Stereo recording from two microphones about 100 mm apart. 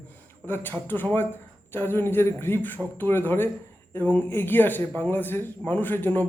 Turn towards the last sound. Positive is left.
turn(degrees=20)  # may be behind; listen again after turning